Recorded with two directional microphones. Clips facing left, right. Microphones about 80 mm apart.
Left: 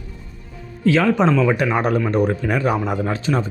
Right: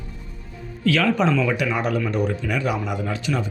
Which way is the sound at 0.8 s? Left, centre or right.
Left.